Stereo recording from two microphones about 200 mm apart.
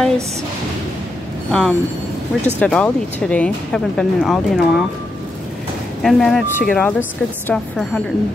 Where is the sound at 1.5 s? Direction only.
Centre (ahead or behind).